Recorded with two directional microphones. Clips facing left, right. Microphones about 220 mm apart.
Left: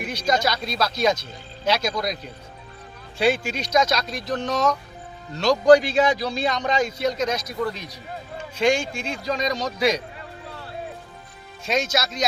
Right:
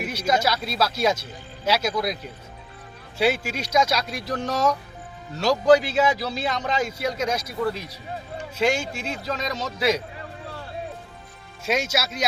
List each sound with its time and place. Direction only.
0.0 s speech: 5° right (ahead or behind)
3.2 s a man's voice: 5° right (ahead or behind)
11.6 s speech: 10° right (ahead or behind)